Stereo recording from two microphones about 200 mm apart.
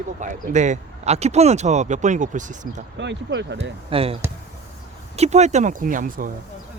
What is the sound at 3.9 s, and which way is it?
Speech, 30° right (ahead or behind).